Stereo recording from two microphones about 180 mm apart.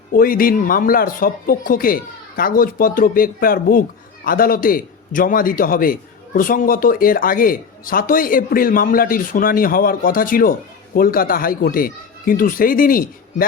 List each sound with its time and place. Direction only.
0.1 s speech: 50° left (ahead or behind)